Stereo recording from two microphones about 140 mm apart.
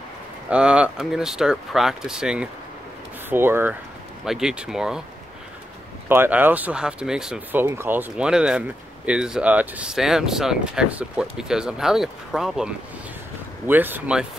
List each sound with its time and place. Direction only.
0.5 s speech: 10° right (ahead or behind)
4.2 s speech: 5° right (ahead or behind)
6.0 s speech: 15° right (ahead or behind)
13.7 s speech: 15° right (ahead or behind)